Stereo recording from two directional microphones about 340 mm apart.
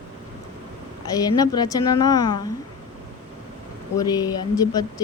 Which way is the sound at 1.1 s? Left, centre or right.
Centre.